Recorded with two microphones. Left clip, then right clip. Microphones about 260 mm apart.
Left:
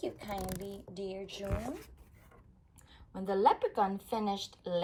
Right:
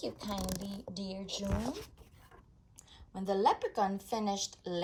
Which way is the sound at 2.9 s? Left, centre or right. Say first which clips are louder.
Right 1 dB; centre.